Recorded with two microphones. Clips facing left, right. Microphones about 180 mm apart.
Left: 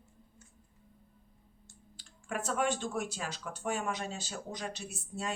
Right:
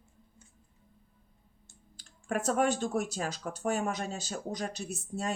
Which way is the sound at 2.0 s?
45° right (ahead or behind).